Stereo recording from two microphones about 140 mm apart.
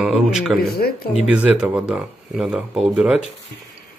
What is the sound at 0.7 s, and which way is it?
Speech, 90° left.